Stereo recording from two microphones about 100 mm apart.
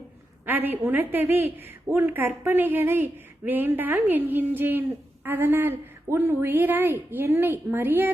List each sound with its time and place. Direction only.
0.4 s a woman's voice: 20° right (ahead or behind)